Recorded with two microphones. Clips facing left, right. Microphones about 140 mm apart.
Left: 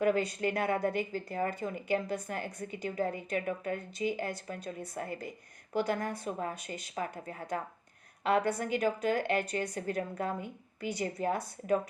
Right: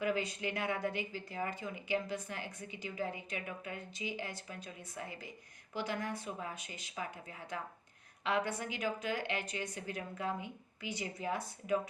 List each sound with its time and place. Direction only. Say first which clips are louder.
0.0 s a woman's voice: left 7 dB; 45° left (ahead or behind)